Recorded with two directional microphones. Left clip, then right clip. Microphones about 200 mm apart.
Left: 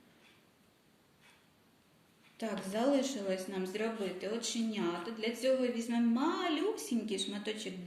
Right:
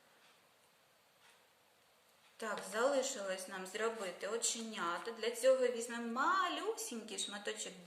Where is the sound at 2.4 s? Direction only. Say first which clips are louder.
Left 1 dB; 20° right (ahead or behind).